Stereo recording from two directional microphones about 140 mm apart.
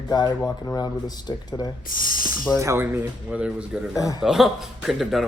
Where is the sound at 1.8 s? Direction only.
85° left.